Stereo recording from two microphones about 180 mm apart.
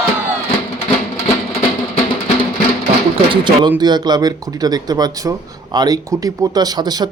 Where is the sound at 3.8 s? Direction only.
25° right (ahead or behind).